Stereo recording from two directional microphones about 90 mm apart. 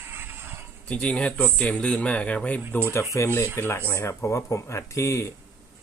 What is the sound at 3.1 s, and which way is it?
Speech, 30° left (ahead or behind).